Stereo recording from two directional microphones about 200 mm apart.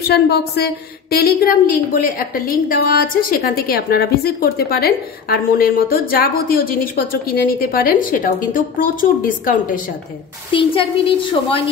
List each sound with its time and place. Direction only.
0.1 s a woman's voice: 55° left (ahead or behind)
10.5 s a woman's voice: 25° left (ahead or behind)